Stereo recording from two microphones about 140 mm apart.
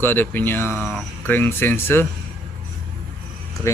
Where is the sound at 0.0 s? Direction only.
15° left (ahead or behind).